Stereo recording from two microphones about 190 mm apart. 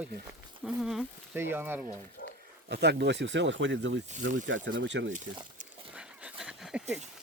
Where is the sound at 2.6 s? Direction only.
60° right (ahead or behind).